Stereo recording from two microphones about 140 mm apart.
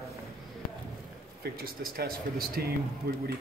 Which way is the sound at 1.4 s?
90° right.